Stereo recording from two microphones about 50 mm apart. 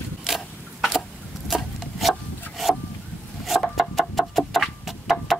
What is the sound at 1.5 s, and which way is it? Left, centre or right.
Wood, centre.